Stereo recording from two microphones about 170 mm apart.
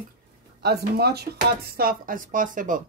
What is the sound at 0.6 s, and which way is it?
Speech, 70° right (ahead or behind).